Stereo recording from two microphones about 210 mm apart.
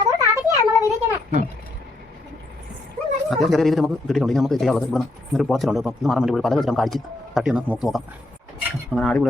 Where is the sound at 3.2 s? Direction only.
Centre (ahead or behind).